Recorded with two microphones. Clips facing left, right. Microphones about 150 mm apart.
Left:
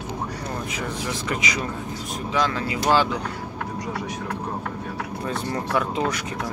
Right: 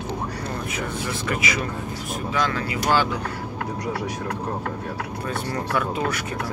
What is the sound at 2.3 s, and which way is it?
Speech, 15° left (ahead or behind).